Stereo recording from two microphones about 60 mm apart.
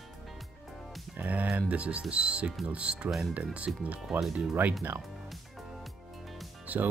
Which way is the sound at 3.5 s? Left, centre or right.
Right.